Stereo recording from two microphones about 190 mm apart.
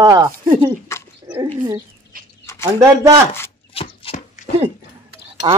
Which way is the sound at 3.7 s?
30° left (ahead or behind).